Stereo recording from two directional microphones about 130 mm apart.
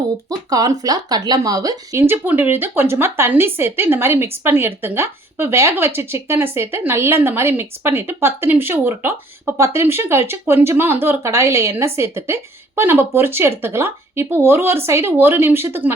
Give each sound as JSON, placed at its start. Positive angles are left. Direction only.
{"t": 0.3, "sound": "speech", "side_deg": -30}